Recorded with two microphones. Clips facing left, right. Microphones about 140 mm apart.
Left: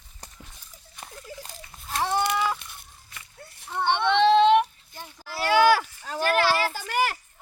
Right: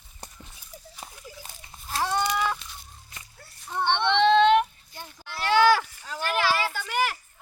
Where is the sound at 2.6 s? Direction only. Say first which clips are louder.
Right 1 dB; 60° left (ahead or behind).